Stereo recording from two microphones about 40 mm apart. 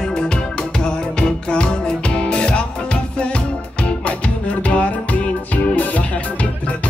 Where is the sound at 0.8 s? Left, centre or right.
Left.